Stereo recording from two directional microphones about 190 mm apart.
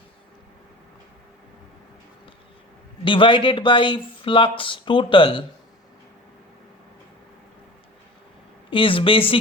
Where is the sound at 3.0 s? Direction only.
25° left (ahead or behind).